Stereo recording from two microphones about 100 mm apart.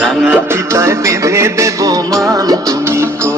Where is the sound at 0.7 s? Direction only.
30° right (ahead or behind).